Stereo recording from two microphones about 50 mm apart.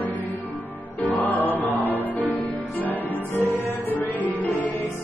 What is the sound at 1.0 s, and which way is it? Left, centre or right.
Music, left.